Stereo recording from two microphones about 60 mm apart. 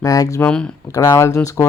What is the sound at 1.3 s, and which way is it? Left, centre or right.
Speech, left.